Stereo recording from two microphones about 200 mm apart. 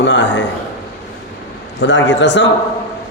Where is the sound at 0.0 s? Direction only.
60° left (ahead or behind).